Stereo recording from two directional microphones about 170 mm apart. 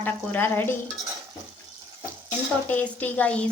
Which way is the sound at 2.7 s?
10° left (ahead or behind).